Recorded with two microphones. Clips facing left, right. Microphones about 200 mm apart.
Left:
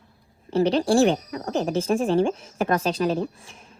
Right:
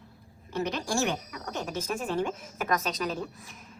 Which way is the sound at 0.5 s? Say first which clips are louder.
Left 11 dB; 30° left (ahead or behind).